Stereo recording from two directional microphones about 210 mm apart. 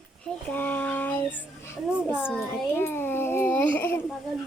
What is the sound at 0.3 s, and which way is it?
Child singing, 10° left (ahead or behind).